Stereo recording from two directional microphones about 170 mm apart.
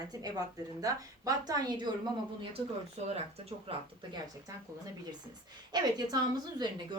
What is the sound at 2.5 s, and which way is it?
Speech, 40° right (ahead or behind).